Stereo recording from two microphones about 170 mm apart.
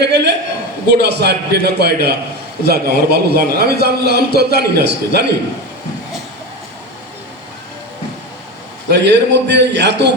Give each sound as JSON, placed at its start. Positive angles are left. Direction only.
{"t": 0.0, "sound": "a sound", "side_deg": -90}
{"t": 0.9, "sound": "a man's voice", "side_deg": -75}
{"t": 8.9, "sound": "a man's voice", "side_deg": -85}